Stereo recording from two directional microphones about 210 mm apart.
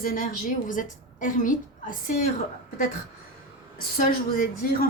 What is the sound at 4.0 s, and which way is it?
Speech, 40° left (ahead or behind).